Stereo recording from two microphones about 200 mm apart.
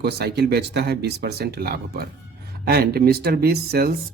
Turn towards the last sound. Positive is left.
turn(degrees=-50)  # may be behind; listen again after turning